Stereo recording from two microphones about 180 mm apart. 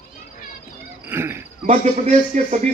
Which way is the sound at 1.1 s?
15° right (ahead or behind).